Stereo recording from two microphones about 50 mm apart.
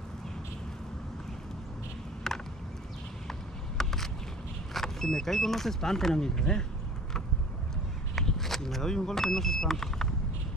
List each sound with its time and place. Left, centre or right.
2.3 s a sound: centre
3.3 s vehicle: centre
4.7 s speech: centre
8.2 s vehicle: centre